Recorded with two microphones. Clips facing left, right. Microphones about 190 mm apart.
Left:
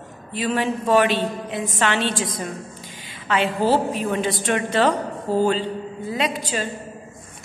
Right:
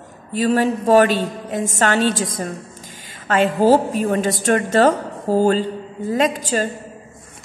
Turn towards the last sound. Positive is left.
turn(degrees=-45)  # may be behind; listen again after turning